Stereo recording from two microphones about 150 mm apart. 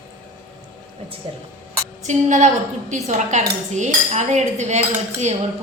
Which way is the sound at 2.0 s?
55° right (ahead or behind).